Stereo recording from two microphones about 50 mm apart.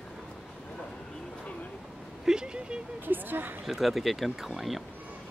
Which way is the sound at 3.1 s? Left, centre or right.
Right.